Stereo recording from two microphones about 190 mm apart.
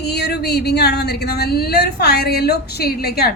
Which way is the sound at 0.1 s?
60° left (ahead or behind).